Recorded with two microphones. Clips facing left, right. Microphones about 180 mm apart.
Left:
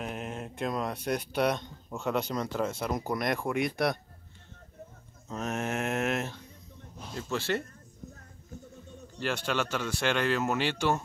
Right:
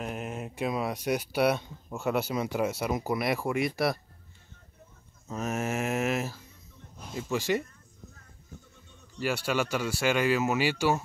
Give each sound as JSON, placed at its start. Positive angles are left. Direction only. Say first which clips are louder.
{"t": 0.0, "sound": "speech", "louder": "right 1 dB", "side_deg": -5}
{"t": 5.3, "sound": "a sound", "louder": "right 1 dB", "side_deg": -5}
{"t": 7.2, "sound": "speech", "louder": "right 3 dB", "side_deg": -10}
{"t": 9.2, "sound": "speech", "louder": "right 2 dB", "side_deg": -10}